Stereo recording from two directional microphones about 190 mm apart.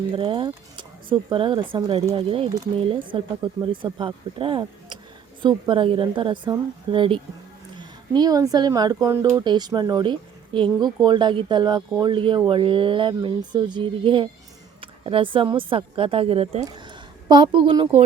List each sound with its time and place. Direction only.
0.2 s speech: 25° right (ahead or behind)